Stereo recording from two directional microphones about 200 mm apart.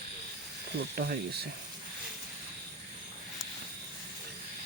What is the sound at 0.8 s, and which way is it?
Speech, 50° right (ahead or behind).